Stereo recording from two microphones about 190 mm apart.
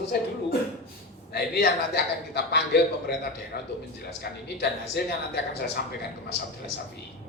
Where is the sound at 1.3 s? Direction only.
60° left (ahead or behind).